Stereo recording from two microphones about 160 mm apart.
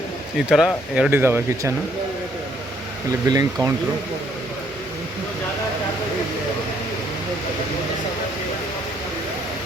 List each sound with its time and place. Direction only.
0.5 s speech: centre (ahead or behind)
3.2 s speech: 25° right (ahead or behind)